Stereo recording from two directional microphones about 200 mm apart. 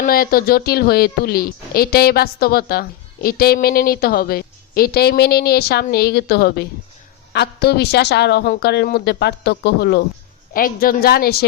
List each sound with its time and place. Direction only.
0.0 s a woman's voice: 45° left (ahead or behind)